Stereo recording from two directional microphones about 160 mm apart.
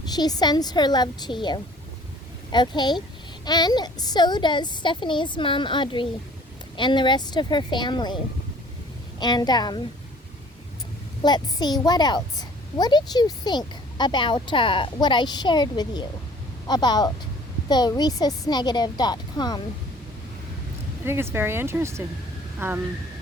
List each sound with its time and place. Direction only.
0.1 s a woman's voice: 25° left (ahead or behind)
11.2 s a woman's voice: 25° left (ahead or behind)
21.0 s speech: 15° right (ahead or behind)